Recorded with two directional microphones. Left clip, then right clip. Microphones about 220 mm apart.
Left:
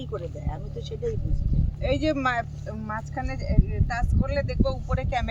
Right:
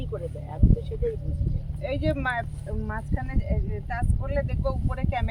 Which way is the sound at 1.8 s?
20° left (ahead or behind).